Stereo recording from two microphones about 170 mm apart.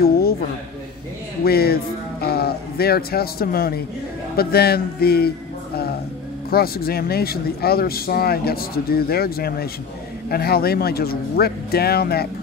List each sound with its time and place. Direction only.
0.0 s a sound: 65° left (ahead or behind)
1.4 s speech: 65° left (ahead or behind)
6.5 s speech: 65° left (ahead or behind)